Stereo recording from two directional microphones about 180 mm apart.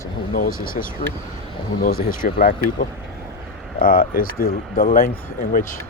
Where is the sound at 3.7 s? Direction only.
50° left (ahead or behind).